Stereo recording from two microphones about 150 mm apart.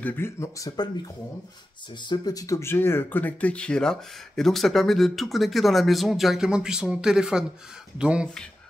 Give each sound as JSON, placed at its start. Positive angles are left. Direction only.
{"t": 0.0, "sound": "speech", "side_deg": 15}